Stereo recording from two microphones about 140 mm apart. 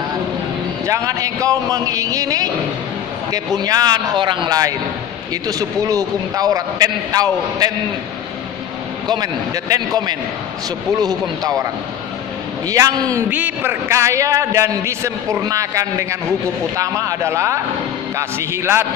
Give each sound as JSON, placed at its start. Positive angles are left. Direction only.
{"t": 0.8, "sound": "a man's voice", "side_deg": -25}
{"t": 9.0, "sound": "a man's voice", "side_deg": -30}
{"t": 12.6, "sound": "a man's voice", "side_deg": -25}